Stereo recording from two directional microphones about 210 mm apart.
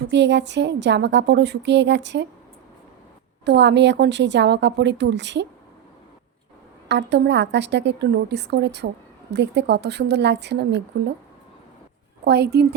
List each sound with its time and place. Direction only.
0.1 s a woman's voice: 55° right (ahead or behind)
3.4 s a woman's voice: 55° right (ahead or behind)
6.8 s a woman's voice: 55° right (ahead or behind)
12.2 s a woman's voice: 50° right (ahead or behind)